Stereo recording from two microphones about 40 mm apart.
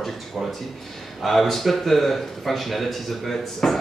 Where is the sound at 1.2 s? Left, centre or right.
Centre.